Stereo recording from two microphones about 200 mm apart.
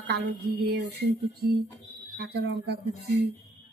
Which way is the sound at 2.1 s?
55° right (ahead or behind).